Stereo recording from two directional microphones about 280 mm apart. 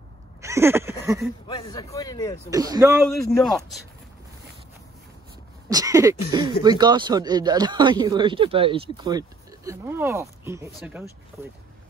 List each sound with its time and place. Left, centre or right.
0.4 s a sound: centre
1.5 s speech: centre
2.5 s speech: centre
3.3 s a man's voice: centre
5.7 s speech: centre